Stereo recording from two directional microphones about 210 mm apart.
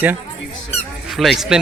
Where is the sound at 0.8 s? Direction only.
Centre (ahead or behind).